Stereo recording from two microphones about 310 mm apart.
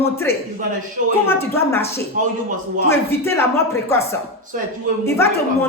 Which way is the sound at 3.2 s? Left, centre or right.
Centre.